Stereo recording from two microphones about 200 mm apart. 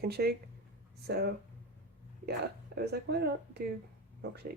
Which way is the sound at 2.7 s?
55° right (ahead or behind).